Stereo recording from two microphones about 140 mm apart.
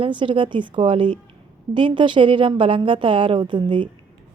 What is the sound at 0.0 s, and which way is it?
A woman's voice, 35° right (ahead or behind).